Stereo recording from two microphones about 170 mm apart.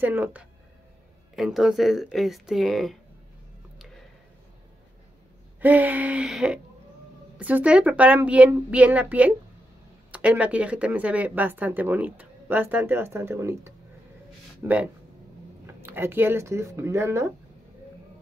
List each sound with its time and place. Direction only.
0.0 s speech: 10° right (ahead or behind)
3.7 s a sound: centre (ahead or behind)
5.6 s speech: 10° right (ahead or behind)